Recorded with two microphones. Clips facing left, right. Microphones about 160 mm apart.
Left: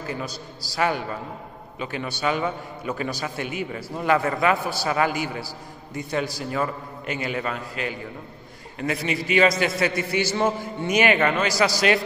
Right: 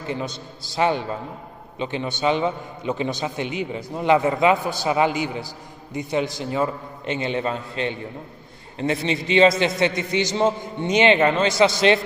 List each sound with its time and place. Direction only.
0.0 s a man's voice: 25° right (ahead or behind)